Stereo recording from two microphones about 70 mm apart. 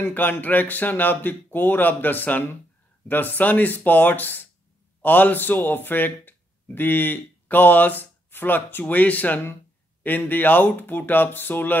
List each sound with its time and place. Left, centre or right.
0.0 s speech: left